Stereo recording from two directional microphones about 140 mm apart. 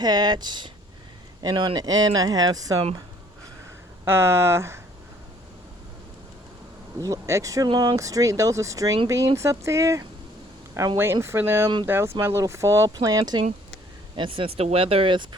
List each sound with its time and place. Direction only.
0.0 s speech: 30° right (ahead or behind)
4.0 s speech: 20° right (ahead or behind)
7.0 s speech: 20° right (ahead or behind)
14.2 s speech: 40° right (ahead or behind)